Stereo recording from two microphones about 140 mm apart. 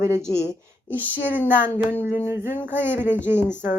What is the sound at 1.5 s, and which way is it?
Speech, 10° right (ahead or behind).